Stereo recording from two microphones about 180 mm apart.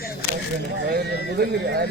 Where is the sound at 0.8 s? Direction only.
60° right (ahead or behind).